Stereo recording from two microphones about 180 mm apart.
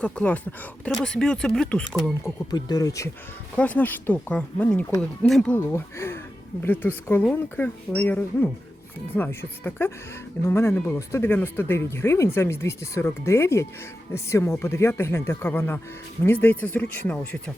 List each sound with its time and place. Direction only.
0.0 s speech: 10° left (ahead or behind)
2.2 s speech: 20° left (ahead or behind)
3.5 s speech: 10° left (ahead or behind)